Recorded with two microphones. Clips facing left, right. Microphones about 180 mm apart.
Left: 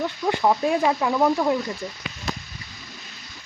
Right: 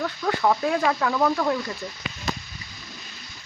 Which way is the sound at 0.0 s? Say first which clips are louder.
Left 1 dB; 15° left (ahead or behind).